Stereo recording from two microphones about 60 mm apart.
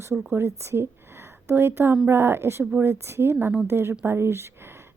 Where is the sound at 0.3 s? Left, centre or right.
Right.